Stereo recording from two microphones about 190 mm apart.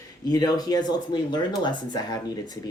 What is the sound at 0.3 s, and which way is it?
Speech, 20° left (ahead or behind).